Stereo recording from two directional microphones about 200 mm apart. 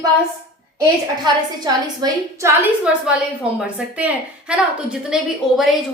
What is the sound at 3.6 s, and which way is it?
A woman's voice, 5° right (ahead or behind).